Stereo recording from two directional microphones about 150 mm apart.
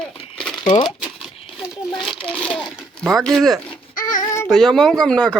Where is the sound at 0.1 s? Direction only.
40° left (ahead or behind).